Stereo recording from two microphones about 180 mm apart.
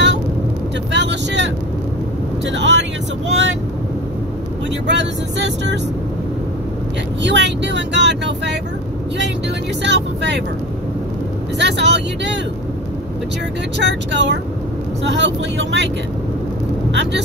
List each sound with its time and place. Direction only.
0.9 s vehicle: 80° right
4.8 s speech: 75° right (ahead or behind)
7.2 s speech: 75° right (ahead or behind)
9.8 s speech: 75° right (ahead or behind)
11.5 s speech: 75° right (ahead or behind)
14.1 s speech: 75° right (ahead or behind)
16.9 s speech: 75° right (ahead or behind)